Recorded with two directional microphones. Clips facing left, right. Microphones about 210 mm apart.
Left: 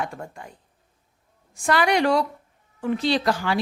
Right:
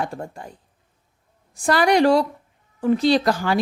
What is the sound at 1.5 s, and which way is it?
Speech, 35° right (ahead or behind).